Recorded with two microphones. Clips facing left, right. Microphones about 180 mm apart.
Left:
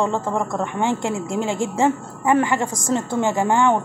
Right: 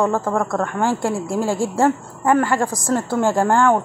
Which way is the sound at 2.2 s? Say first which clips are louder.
Right 1 dB; 10° left (ahead or behind).